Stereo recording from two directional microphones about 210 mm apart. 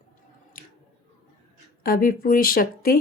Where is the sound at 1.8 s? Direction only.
45° left (ahead or behind).